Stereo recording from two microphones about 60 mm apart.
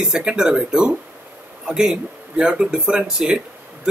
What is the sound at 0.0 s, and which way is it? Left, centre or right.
Speech, centre.